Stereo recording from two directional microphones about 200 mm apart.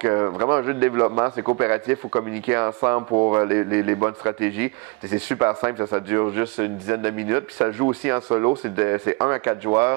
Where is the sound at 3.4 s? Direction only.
15° right (ahead or behind).